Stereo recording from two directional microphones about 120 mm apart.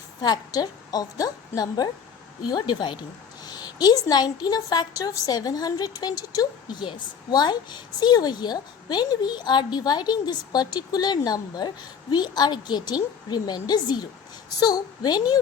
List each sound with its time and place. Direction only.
0.2 s a woman's voice: 35° left (ahead or behind)